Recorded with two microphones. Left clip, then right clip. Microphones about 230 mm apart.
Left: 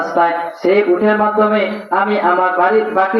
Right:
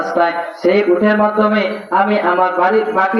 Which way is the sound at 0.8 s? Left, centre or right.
Right.